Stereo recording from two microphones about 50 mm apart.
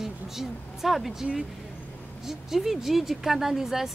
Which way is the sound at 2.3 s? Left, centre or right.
Centre.